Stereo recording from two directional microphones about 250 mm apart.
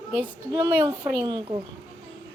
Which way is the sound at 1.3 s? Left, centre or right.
Centre.